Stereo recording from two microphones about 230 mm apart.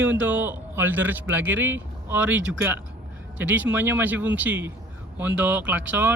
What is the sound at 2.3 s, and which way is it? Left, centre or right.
Speech, right.